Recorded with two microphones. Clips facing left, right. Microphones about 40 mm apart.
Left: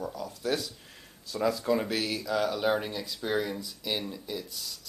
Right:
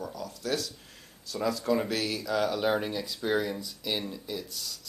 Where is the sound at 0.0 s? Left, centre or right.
Centre.